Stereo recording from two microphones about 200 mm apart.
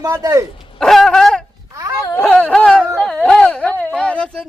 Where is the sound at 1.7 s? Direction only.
15° right (ahead or behind).